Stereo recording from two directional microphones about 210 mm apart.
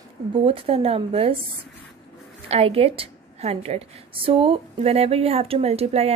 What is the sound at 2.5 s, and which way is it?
A woman's voice, 30° right (ahead or behind).